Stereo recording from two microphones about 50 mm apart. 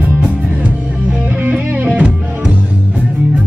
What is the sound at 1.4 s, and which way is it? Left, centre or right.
Music, right.